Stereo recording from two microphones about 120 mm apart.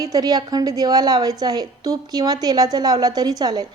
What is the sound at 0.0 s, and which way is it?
A woman's voice, 30° right (ahead or behind).